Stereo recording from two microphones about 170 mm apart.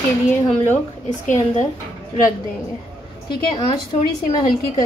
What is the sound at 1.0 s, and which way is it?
Speech, 45° left (ahead or behind).